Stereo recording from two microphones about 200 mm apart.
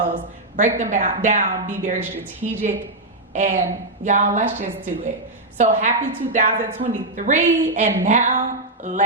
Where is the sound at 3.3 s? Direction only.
35° right (ahead or behind).